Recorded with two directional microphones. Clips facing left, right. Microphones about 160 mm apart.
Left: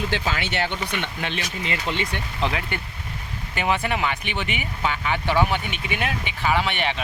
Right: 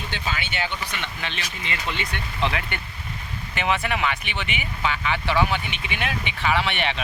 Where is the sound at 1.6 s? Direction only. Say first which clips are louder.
Left 3 dB; 35° left (ahead or behind).